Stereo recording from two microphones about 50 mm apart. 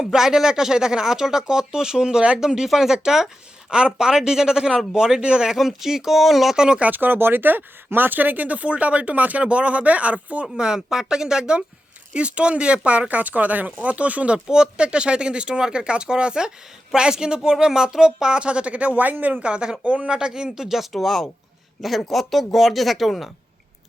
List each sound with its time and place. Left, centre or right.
0.0 s speech: centre
5.5 s speech: centre
6.6 s speech: centre
6.8 s speech: right
10.4 s speech: centre
14.3 s speech: centre; by 19.4 s right
19.4 s speech: right; by 23.3 s centre